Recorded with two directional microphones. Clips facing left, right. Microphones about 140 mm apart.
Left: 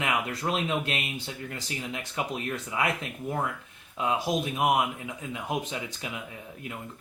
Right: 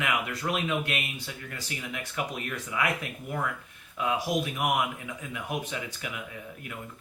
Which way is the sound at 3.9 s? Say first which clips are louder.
Left 1 dB; 25° left (ahead or behind).